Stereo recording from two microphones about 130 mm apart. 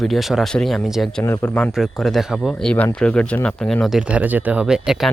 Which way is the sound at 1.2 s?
20° left (ahead or behind).